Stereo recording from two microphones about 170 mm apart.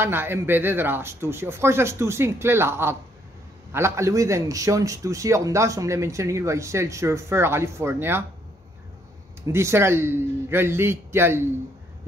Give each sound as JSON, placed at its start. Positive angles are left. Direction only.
{"t": 0.0, "sound": "speech", "side_deg": -15}
{"t": 9.5, "sound": "speech", "side_deg": -15}